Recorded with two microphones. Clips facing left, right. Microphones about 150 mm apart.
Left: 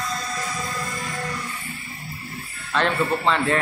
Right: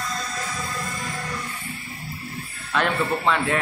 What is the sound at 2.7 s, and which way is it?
Speech, 5° right (ahead or behind).